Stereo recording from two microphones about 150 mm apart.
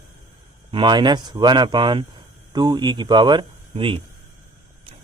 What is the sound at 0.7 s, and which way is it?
Speech, 30° right (ahead or behind).